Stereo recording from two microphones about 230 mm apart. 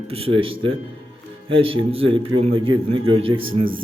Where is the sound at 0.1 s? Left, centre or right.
Right.